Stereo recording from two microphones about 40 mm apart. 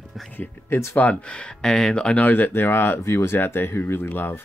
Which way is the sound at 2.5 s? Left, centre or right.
Left.